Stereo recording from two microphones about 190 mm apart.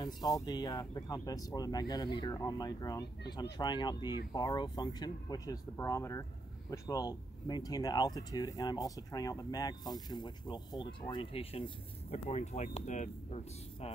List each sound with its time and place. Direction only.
0.0 s speech: 20° left (ahead or behind)